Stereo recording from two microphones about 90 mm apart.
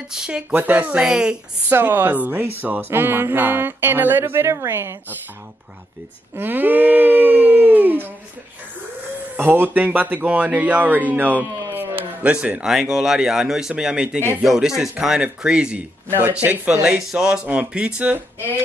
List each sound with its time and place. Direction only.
0.1 s speech: 10° right (ahead or behind)
0.5 s speech: 20° right (ahead or behind)
1.7 s music: 25° right (ahead or behind)
6.3 s a sound: 20° right (ahead or behind)
9.4 s music: 20° right (ahead or behind)
11.7 s a sound: 20° right (ahead or behind)
12.7 s speech: 5° right (ahead or behind)